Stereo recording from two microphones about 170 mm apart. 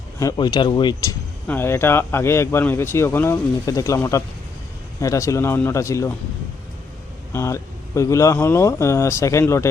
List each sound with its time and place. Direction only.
0.2 s speech: 20° left (ahead or behind)
1.5 s speech: 15° left (ahead or behind)
7.3 s speech: 15° left (ahead or behind)